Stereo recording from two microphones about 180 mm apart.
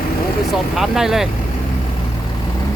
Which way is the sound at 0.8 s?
Centre (ahead or behind).